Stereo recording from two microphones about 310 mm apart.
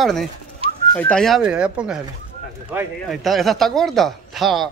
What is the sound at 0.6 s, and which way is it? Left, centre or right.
Whistling, centre.